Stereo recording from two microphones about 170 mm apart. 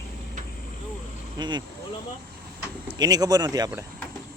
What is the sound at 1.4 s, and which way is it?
Speech, 25° right (ahead or behind).